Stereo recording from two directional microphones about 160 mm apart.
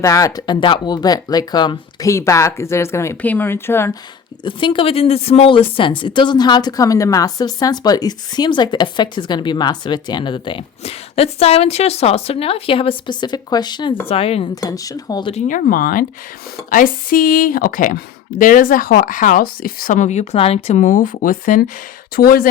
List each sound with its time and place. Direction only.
0.0 s a woman's voice: 20° left (ahead or behind)
4.4 s a woman's voice: 30° left (ahead or behind)
14.1 s speech: 35° left (ahead or behind)
14.5 s a woman's voice: 20° left (ahead or behind)
15.3 s speech: 50° left (ahead or behind); by 22.4 s 65° left (ahead or behind)